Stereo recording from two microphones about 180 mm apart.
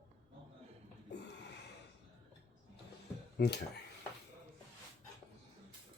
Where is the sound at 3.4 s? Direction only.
65° left (ahead or behind).